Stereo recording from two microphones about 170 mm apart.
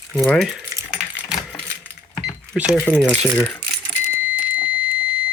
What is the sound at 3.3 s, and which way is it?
Speech, 10° left (ahead or behind).